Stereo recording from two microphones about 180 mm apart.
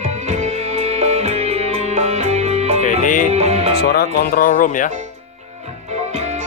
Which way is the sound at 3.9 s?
60° left (ahead or behind).